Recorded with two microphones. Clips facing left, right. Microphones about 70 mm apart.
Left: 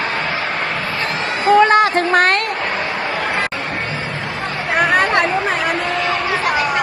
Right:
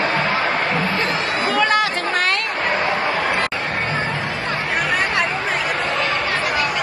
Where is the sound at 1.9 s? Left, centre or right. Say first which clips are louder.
Left 6 dB; left.